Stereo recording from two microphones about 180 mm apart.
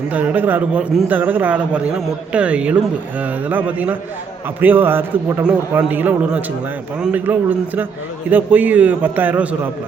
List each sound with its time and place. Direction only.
0.1 s a man's voice: 10° right (ahead or behind)